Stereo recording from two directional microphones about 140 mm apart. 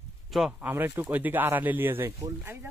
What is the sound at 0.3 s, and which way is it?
A woman's voice, 5° right (ahead or behind).